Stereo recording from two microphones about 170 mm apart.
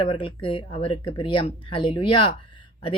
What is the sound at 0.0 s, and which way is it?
Speech, 30° left (ahead or behind).